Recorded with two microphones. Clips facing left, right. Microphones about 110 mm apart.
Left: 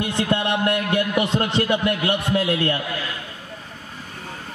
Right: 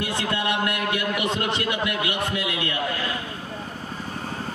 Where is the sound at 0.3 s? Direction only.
30° left (ahead or behind).